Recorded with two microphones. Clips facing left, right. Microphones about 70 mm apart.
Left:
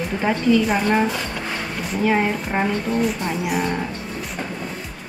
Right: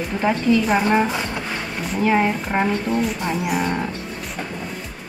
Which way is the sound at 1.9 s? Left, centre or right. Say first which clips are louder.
Right 1 dB; centre.